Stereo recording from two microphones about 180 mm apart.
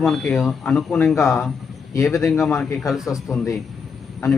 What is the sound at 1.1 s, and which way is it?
A man's voice, 15° left (ahead or behind).